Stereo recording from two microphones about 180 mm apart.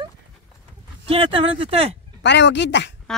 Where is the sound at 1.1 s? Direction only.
30° right (ahead or behind).